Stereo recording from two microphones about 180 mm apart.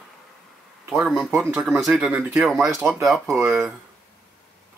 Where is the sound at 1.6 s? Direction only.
Centre (ahead or behind).